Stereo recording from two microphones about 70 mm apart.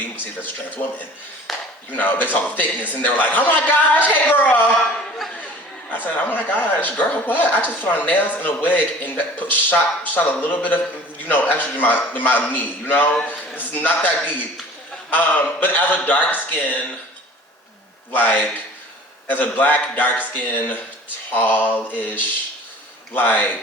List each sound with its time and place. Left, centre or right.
0.0 s speech: left
1.5 s chop: centre
1.9 s speech: left
4.7 s speech: centre
6.1 s speech: left
18.1 s speech: left